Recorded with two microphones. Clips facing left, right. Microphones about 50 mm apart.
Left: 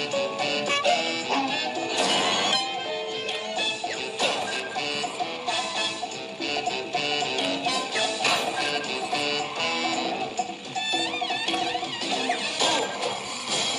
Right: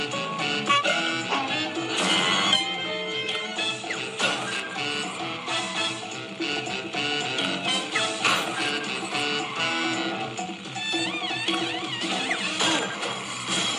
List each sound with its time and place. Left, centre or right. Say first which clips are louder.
0.1 s music: left 2 dB; centre
7.1 s music: even; centre
11.5 s music: left 1 dB; centre